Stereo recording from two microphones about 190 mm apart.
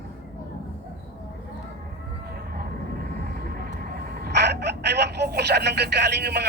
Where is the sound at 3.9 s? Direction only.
55° right (ahead or behind).